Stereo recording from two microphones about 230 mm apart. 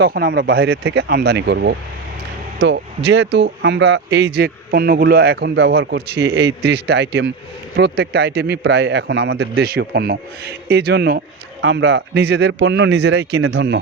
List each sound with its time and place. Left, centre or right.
0.0 s speech: right